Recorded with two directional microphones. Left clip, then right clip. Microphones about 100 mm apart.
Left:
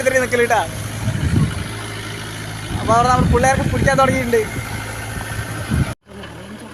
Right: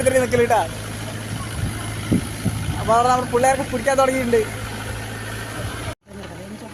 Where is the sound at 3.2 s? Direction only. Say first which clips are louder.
Left 2 dB; 15° right (ahead or behind).